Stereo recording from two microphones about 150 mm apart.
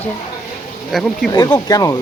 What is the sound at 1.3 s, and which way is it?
Speech, 25° left (ahead or behind).